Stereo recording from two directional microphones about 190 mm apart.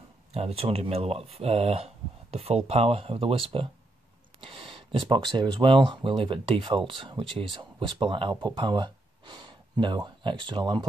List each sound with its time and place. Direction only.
0.3 s speech: 35° right (ahead or behind)